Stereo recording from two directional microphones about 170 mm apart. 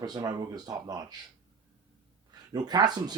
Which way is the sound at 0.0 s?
20° right (ahead or behind).